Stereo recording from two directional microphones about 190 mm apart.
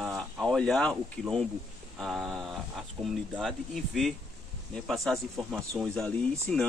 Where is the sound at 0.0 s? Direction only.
Centre (ahead or behind).